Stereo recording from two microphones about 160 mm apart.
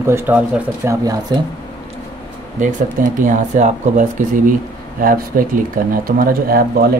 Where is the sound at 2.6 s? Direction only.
55° right (ahead or behind).